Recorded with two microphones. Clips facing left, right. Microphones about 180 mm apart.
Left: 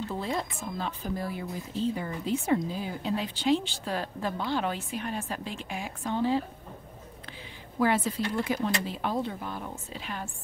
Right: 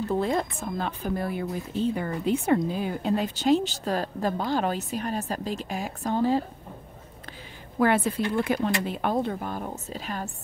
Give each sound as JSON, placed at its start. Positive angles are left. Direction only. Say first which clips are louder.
{"t": 0.1, "sound": "speech", "louder": "right 6 dB", "side_deg": -55}
{"t": 7.8, "sound": "speech", "louder": "right 3 dB", "side_deg": -55}